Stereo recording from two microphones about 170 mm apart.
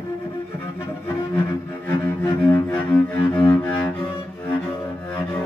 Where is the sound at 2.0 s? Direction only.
10° left (ahead or behind).